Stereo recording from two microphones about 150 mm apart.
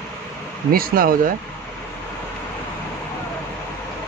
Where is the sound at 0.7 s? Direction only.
75° right (ahead or behind).